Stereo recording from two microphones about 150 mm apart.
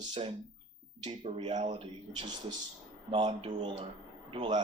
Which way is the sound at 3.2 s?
35° right (ahead or behind).